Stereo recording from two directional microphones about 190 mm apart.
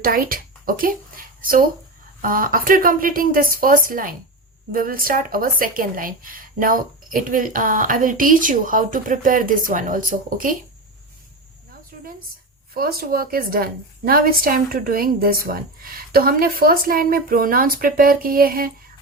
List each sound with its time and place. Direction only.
0.0 s a child's voice: 50° right (ahead or behind)
12.7 s a woman's voice: 50° right (ahead or behind)